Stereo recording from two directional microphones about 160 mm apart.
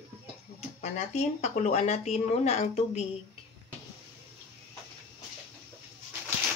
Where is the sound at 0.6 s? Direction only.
45° left (ahead or behind).